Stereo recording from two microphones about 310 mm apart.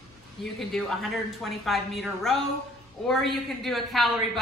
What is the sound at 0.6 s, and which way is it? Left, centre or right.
A man's voice, centre.